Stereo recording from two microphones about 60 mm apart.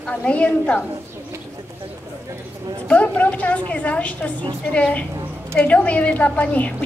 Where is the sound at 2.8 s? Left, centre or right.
Left.